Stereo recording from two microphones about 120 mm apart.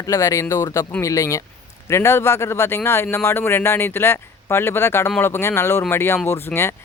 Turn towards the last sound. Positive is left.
turn(degrees=20)  # may be behind; listen again after turning